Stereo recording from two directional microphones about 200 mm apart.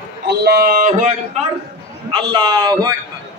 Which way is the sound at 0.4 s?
50° right (ahead or behind).